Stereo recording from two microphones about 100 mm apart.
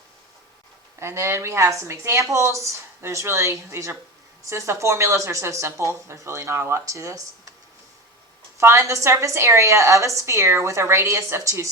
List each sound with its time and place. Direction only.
0.9 s a woman's voice: 25° right (ahead or behind)
8.5 s a woman's voice: 30° right (ahead or behind)